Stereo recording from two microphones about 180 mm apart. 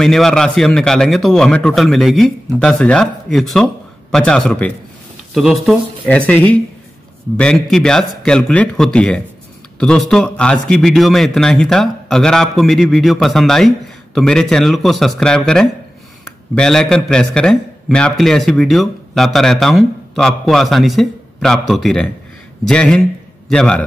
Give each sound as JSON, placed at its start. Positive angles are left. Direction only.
{"t": 0.0, "sound": "a man's voice", "side_deg": 0}